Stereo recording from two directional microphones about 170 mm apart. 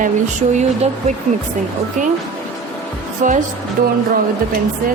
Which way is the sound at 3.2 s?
50° right (ahead or behind).